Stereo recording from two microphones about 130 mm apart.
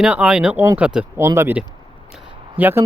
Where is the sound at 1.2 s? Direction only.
20° right (ahead or behind).